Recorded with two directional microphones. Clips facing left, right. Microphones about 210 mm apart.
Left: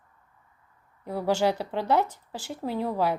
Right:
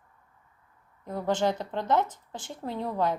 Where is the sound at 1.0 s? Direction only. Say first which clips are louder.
Left 2 dB; 10° left (ahead or behind).